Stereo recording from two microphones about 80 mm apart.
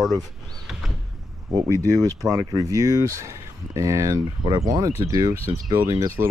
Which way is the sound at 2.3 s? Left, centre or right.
Right.